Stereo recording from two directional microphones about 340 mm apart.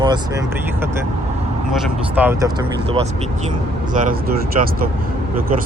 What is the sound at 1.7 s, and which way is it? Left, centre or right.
Speech, centre.